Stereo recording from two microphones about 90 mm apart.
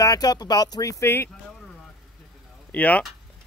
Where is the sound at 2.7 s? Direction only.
20° left (ahead or behind).